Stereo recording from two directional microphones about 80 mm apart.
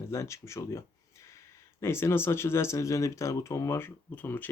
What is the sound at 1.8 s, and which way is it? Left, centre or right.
Speech, left.